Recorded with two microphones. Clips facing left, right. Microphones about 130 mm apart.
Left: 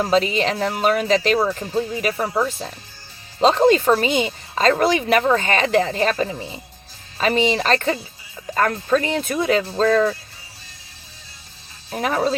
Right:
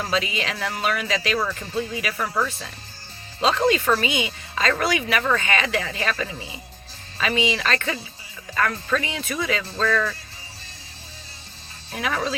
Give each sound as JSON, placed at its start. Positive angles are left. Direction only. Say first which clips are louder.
{"t": 0.1, "sound": "speech", "louder": "left 7 dB", "side_deg": 40}
{"t": 2.5, "sound": "speech", "louder": "left 6 dB", "side_deg": 40}
{"t": 9.6, "sound": "speech", "louder": "left 6 dB", "side_deg": 35}
{"t": 11.9, "sound": "speech", "louder": "left 5 dB", "side_deg": 35}